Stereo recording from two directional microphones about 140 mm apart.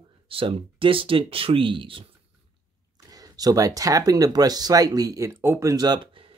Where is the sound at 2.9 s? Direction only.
25° right (ahead or behind).